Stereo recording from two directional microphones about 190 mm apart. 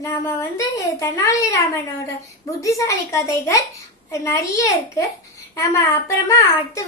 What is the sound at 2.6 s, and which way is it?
A woman's voice, 15° left (ahead or behind).